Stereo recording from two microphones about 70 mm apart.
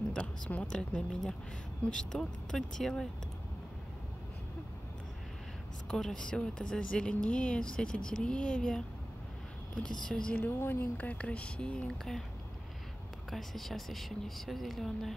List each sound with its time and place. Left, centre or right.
0.5 s speech: centre
5.9 s speech: centre
9.8 s speech: centre
10.4 s speech: left; by 12.2 s centre
13.3 s speech: centre